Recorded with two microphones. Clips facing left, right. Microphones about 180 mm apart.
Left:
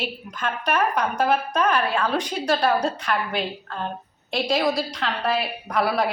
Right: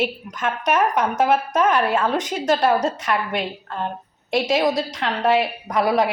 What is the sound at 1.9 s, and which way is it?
Speech, 20° right (ahead or behind).